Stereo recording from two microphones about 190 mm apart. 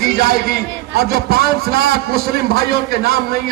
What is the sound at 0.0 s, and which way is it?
A man's voice, 55° right (ahead or behind).